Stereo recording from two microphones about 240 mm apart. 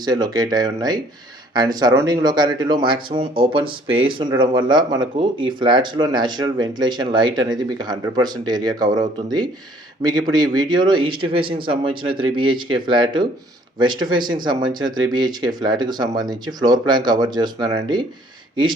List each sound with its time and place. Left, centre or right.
0.0 s speech: centre